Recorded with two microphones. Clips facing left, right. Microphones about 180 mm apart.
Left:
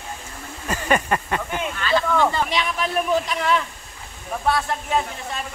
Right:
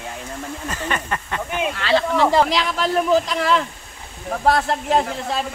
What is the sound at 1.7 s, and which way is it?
Speech, 80° right.